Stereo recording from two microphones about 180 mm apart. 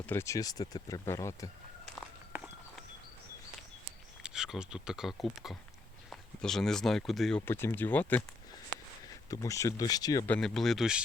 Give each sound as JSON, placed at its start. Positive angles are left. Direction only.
{"t": 0.0, "sound": "speech", "side_deg": 10}
{"t": 2.3, "sound": "walk", "side_deg": 0}
{"t": 4.2, "sound": "speech", "side_deg": -5}
{"t": 7.4, "sound": "speech", "side_deg": 15}
{"t": 10.2, "sound": "speech", "side_deg": 5}